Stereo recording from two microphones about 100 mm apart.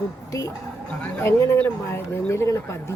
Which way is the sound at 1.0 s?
25° left (ahead or behind).